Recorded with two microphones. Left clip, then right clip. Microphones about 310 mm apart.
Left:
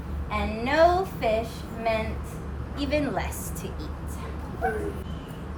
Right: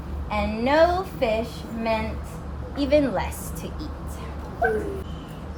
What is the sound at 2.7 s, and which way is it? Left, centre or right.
Speech, centre.